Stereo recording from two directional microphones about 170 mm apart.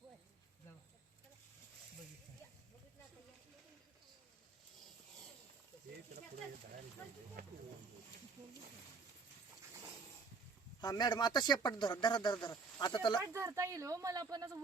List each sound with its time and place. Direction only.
7.4 s speech: 60° right (ahead or behind)
10.8 s speech: 25° left (ahead or behind)
13.2 s speech: 15° right (ahead or behind)